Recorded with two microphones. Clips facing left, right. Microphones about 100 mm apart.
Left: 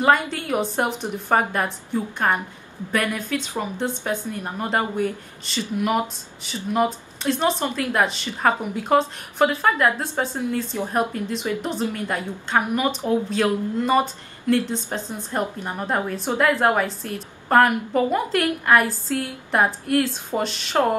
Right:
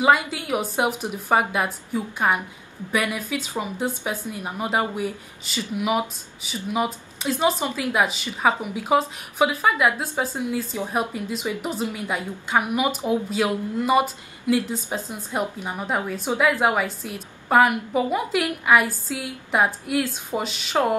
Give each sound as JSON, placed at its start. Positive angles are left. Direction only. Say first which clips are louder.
{"t": 0.0, "sound": "a woman's voice", "louder": "even", "side_deg": -5}